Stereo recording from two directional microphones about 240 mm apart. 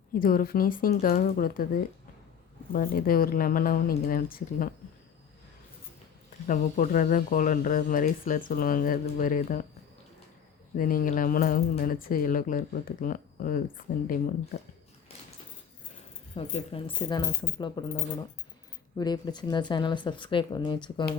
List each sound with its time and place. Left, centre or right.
0.1 s speech: left
6.5 s speech: left
10.8 s speech: left
16.3 s speech: left